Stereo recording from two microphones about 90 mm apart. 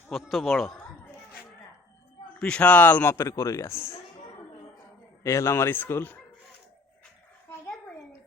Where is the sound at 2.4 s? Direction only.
15° left (ahead or behind).